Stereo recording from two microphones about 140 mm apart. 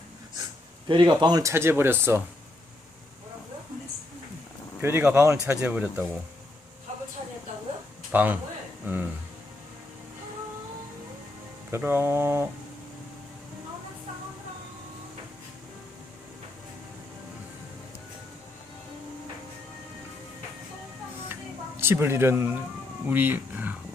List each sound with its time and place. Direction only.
0.9 s speech: 35° right (ahead or behind); by 2.2 s 15° right (ahead or behind)
4.8 s a man's voice: 15° right (ahead or behind)
5.5 s a man's voice: 10° right (ahead or behind)
8.1 s a man's voice: 10° right (ahead or behind)
11.7 s a man's voice: 15° right (ahead or behind)
21.8 s a man's voice: 15° right (ahead or behind)